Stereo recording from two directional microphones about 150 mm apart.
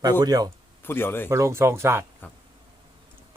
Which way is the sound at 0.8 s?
15° left (ahead or behind).